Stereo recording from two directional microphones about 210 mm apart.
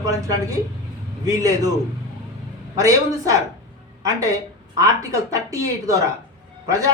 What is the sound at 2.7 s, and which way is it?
A man's voice, 15° right (ahead or behind).